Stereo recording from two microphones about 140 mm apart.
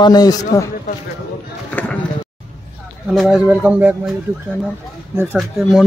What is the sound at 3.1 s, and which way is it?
Speech, 5° right (ahead or behind).